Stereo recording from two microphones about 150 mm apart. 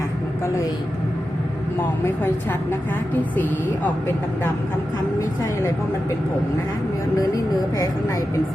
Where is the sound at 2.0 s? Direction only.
15° left (ahead or behind).